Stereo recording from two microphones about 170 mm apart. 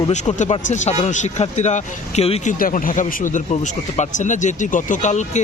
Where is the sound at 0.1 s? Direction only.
45° left (ahead or behind).